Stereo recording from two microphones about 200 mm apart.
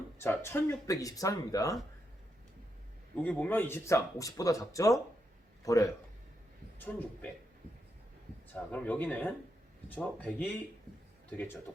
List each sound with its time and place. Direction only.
0.2 s speech: 10° left (ahead or behind)
3.2 s speech: 10° left (ahead or behind)
8.7 s speech: 10° left (ahead or behind)